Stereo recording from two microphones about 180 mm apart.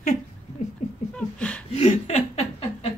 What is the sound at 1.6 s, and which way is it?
Chuckle, 35° left (ahead or behind).